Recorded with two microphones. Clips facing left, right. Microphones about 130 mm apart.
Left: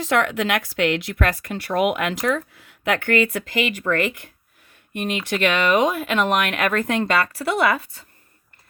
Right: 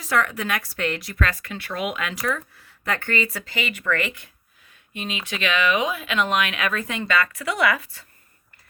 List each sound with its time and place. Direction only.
0.2 s a woman's voice: 75° left (ahead or behind)
1.1 s a woman's voice: 50° left (ahead or behind); by 3.2 s 70° left (ahead or behind)
3.4 s speech: 40° left (ahead or behind)
4.9 s speech: 55° left (ahead or behind)
7.1 s a woman's voice: 35° left (ahead or behind)